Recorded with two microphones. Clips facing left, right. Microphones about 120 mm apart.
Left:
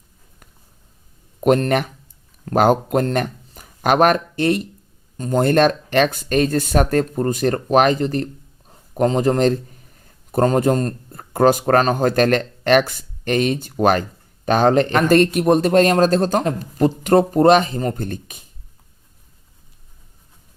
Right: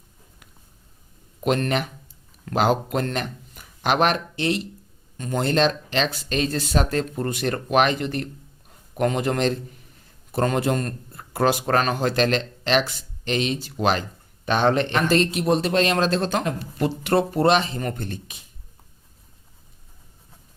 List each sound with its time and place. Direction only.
1.4 s a man's voice: 40° left (ahead or behind)
5.1 s a man's voice: 40° left (ahead or behind)